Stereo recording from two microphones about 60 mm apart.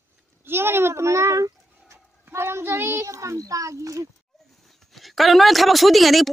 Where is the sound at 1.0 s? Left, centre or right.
Right.